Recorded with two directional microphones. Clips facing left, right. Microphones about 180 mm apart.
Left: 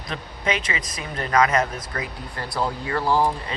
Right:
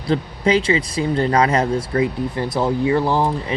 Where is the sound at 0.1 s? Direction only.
30° right (ahead or behind).